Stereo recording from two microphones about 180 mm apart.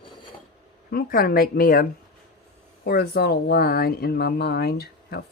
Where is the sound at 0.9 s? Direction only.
55° left (ahead or behind).